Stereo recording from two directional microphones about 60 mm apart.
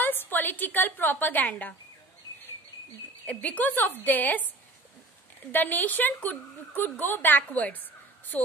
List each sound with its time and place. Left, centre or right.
0.0 s a woman's voice: left
3.3 s a woman's voice: left
5.5 s a woman's voice: left